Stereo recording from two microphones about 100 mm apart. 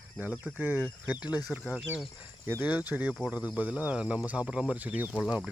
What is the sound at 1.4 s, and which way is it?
Speech, 5° right (ahead or behind).